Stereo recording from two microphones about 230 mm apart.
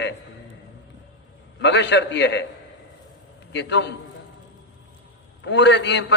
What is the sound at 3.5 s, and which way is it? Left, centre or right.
Speech, left.